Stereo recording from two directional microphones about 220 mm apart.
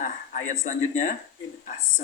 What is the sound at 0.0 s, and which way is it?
Speech, 35° left (ahead or behind).